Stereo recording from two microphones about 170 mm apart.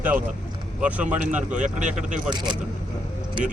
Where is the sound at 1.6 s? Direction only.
45° right (ahead or behind).